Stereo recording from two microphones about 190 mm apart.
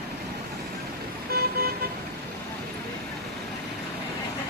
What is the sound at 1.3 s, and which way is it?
Vehicle, 55° right (ahead or behind).